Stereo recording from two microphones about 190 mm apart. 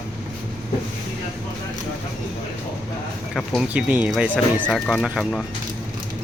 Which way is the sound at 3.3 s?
Centre (ahead or behind).